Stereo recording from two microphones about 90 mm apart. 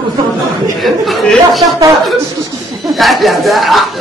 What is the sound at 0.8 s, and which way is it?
Speech, centre (ahead or behind).